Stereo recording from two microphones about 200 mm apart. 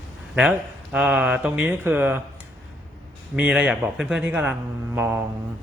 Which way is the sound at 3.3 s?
5° right (ahead or behind).